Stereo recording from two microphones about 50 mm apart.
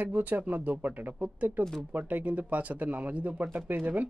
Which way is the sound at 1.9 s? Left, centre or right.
Right.